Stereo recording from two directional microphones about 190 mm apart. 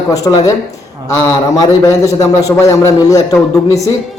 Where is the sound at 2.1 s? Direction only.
15° left (ahead or behind).